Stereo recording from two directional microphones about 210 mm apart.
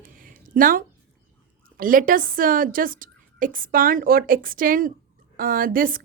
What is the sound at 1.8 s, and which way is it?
Speech, 40° right (ahead or behind).